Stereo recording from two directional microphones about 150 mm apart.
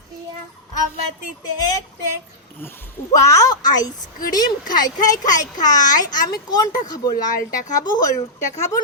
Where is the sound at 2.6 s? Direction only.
20° left (ahead or behind).